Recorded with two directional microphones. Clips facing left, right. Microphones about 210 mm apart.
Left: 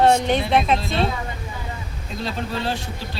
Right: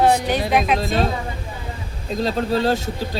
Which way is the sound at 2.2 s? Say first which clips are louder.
Right 7 dB; 40° right (ahead or behind).